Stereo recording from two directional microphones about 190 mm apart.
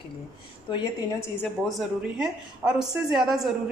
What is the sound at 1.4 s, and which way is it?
A woman's voice, centre (ahead or behind).